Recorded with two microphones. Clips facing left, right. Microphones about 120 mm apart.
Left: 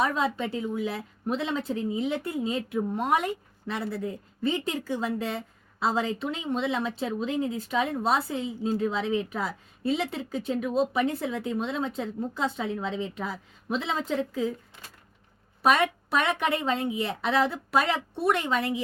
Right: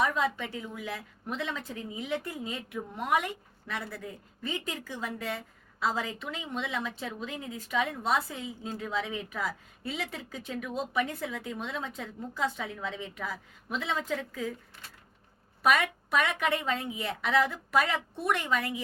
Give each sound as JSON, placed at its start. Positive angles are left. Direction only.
{"t": 0.0, "sound": "a woman's voice", "side_deg": 30}
{"t": 15.6, "sound": "a woman's voice", "side_deg": 30}